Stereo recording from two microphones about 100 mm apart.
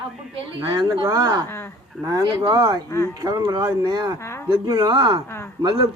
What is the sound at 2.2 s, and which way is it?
Speech, 55° right (ahead or behind).